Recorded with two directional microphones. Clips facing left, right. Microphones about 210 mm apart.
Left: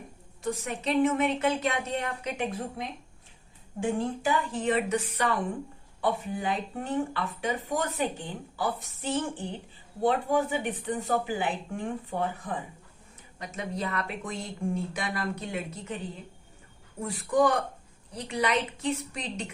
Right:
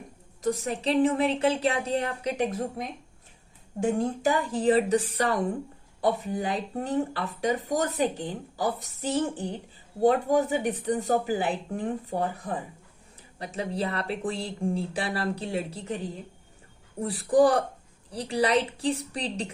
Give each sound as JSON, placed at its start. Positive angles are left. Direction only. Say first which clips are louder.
{"t": 0.4, "sound": "speech", "louder": "right 4 dB", "side_deg": -35}